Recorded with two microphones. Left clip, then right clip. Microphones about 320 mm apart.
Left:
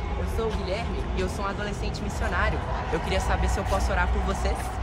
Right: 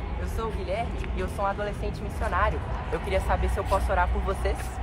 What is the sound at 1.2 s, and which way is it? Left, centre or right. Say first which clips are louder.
Speech: right 2 dB; centre.